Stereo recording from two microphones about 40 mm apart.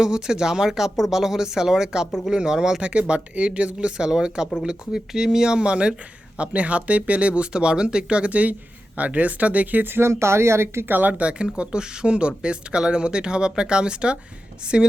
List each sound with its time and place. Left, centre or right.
0.0 s speech: centre
2.8 s speech: right
9.8 s speech: right
11.1 s speech: right